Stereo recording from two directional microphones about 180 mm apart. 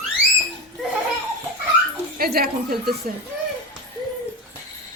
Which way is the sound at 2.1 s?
55° right (ahead or behind).